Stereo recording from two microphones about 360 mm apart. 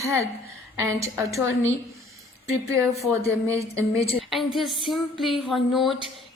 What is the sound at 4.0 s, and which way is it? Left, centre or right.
Speech, centre.